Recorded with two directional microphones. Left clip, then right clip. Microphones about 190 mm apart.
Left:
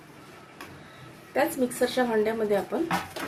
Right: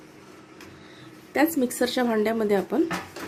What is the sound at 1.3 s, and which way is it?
A woman's voice, 55° right (ahead or behind).